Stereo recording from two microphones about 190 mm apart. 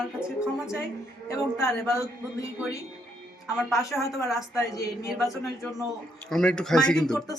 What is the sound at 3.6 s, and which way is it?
Speech, centre (ahead or behind).